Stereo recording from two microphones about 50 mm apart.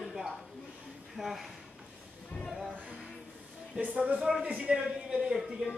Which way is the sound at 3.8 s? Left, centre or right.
Right.